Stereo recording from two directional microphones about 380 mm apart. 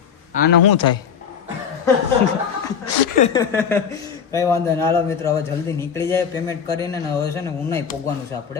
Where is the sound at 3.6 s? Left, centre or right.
Centre.